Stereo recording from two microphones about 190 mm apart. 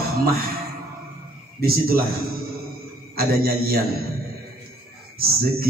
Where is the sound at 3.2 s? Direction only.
55° right (ahead or behind).